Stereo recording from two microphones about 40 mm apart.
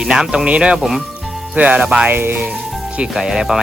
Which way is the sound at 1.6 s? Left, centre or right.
Right.